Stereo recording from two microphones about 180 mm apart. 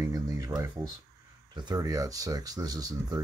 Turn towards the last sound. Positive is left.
turn(degrees=-20)  # may be behind; listen again after turning